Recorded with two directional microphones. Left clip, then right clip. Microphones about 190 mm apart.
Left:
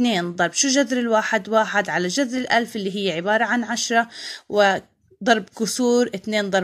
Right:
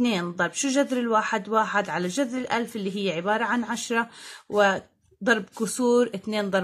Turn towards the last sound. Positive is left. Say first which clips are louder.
# left 4 dB
turn(degrees=20)  # may be behind; listen again after turning